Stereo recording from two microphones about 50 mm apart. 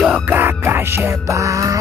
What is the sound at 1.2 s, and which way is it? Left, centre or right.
Music, right.